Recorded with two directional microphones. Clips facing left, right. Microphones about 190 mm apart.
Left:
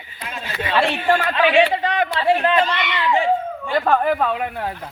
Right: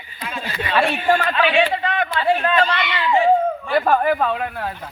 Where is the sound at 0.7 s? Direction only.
5° right (ahead or behind).